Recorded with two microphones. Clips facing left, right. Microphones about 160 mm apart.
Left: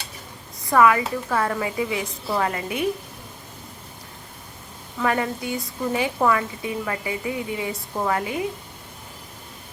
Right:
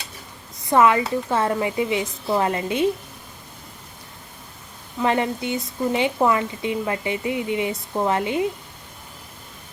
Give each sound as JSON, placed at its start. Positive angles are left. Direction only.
{"t": 0.7, "sound": "speech", "side_deg": -25}
{"t": 4.9, "sound": "speech", "side_deg": -20}